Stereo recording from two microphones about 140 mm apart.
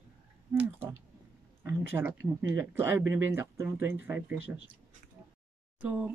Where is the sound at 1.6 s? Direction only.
15° right (ahead or behind).